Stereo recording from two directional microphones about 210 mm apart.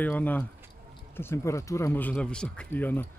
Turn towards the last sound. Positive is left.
turn(degrees=10)  # may be behind; listen again after turning